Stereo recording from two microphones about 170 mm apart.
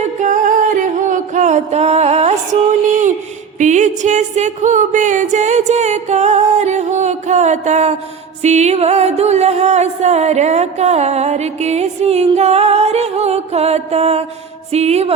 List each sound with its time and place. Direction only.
0.2 s music: 50° right (ahead or behind)